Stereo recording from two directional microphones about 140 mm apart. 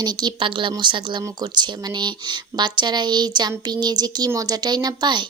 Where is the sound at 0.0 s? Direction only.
30° right (ahead or behind).